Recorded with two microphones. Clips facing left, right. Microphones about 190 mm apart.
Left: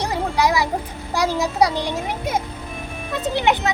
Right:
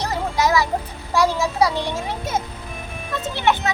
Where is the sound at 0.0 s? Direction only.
15° left (ahead or behind).